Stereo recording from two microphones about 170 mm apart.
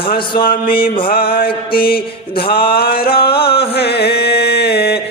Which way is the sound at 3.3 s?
65° left (ahead or behind).